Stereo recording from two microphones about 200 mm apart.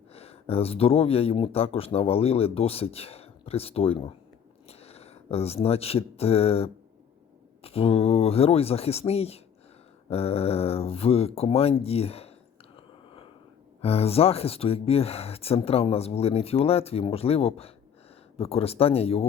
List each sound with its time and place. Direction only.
0.1 s speech: 30° left (ahead or behind)
12.7 s chewing: 25° left (ahead or behind)
13.8 s speech: 30° left (ahead or behind)